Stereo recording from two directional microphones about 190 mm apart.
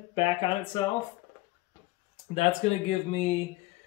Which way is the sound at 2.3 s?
35° left (ahead or behind).